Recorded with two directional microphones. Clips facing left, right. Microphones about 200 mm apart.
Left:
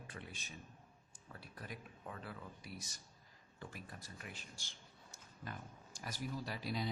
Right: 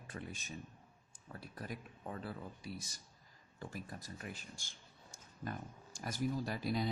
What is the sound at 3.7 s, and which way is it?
Speech, 45° right (ahead or behind).